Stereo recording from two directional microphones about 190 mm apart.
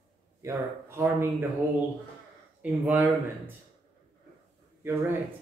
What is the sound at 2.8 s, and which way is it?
Speech, 10° right (ahead or behind).